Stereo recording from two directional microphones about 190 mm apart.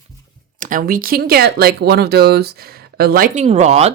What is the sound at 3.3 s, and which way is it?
Speech, 35° right (ahead or behind).